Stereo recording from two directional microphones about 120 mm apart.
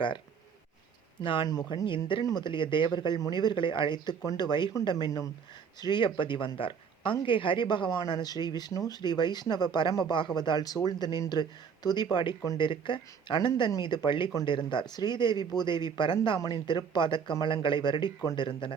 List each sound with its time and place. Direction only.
1.2 s speech: 45° left (ahead or behind)